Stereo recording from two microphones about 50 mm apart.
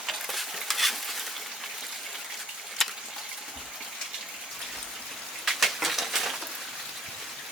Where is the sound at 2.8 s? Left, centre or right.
Centre.